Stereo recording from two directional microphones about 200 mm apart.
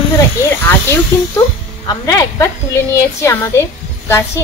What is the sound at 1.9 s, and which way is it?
A woman's voice, 20° left (ahead or behind).